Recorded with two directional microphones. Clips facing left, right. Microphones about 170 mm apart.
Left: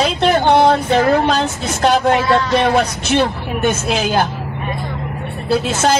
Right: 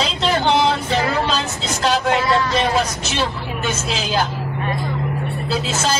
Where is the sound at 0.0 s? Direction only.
55° left (ahead or behind).